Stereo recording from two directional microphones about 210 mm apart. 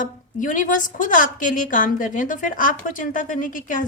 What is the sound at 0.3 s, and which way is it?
Speech, 40° left (ahead or behind).